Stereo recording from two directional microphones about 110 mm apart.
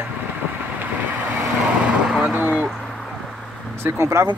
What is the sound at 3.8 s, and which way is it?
Speech, 25° right (ahead or behind).